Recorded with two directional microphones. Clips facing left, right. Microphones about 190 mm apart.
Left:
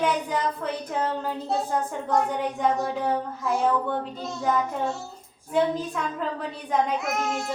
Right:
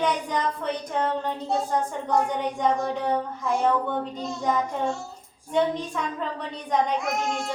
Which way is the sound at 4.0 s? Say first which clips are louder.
Right 1 dB; 5° left (ahead or behind).